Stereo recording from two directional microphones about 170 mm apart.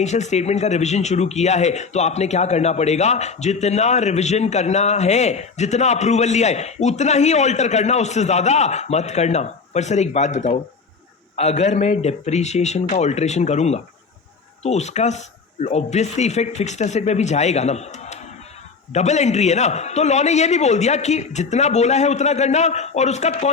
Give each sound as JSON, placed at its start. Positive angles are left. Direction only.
{"t": 0.0, "sound": "speech", "side_deg": 40}